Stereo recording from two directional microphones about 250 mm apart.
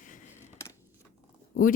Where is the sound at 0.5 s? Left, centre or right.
Centre.